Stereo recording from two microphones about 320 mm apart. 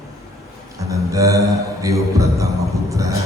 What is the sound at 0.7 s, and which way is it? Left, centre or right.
Music, centre.